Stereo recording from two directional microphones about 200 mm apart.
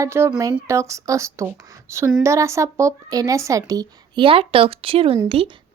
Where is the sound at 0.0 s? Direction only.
15° right (ahead or behind).